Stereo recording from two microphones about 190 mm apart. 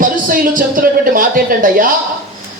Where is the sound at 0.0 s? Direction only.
45° right (ahead or behind).